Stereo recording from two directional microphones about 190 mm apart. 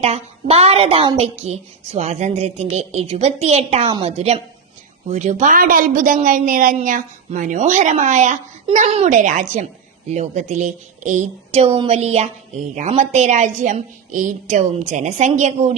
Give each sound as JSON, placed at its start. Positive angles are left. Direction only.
{"t": 0.0, "sound": "a woman's voice", "side_deg": -35}